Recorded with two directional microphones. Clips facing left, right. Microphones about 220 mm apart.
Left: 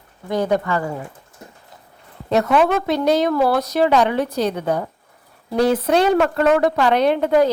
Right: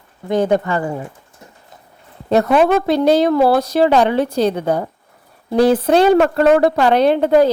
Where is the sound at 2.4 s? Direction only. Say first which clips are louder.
Right 3 dB; 35° right (ahead or behind).